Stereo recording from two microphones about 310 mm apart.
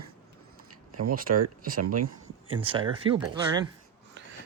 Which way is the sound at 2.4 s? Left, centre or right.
Centre.